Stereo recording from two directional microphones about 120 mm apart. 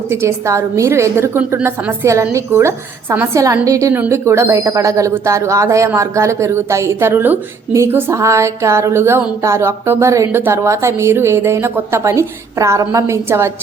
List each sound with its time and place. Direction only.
0.1 s a woman's voice: 20° right (ahead or behind)